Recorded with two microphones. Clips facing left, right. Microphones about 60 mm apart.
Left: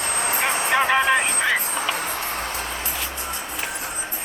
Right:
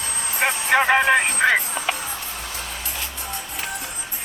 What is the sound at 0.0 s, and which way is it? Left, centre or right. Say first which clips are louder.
Vehicle: left 5 dB; left.